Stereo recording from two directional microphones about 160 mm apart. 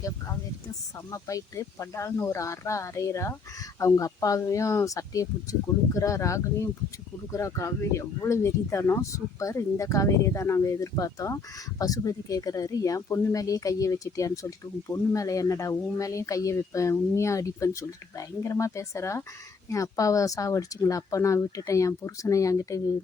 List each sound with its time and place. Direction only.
0.9 s speech: 20° left (ahead or behind)